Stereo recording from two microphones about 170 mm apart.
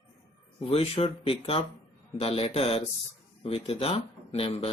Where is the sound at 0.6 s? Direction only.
35° left (ahead or behind).